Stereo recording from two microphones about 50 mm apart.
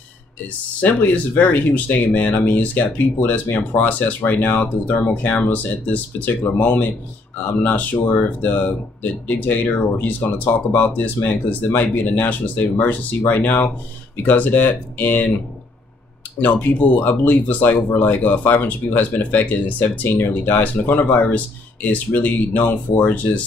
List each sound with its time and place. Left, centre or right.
0.7 s speech: left
16.5 s speech: left
20.1 s speech: left